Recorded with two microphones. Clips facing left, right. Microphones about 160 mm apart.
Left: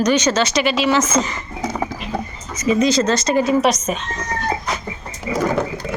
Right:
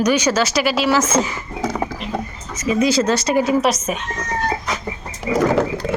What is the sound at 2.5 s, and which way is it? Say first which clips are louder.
Speech: left 1 dB; 5° right (ahead or behind).